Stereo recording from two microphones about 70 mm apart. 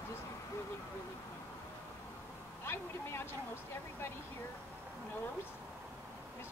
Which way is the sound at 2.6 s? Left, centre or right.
Left.